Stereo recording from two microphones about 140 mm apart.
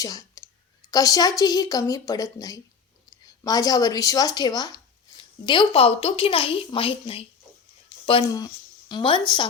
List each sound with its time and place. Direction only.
0.0 s a woman's voice: 25° left (ahead or behind)